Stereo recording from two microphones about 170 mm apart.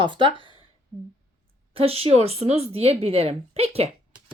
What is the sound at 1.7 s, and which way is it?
Speech, 35° right (ahead or behind).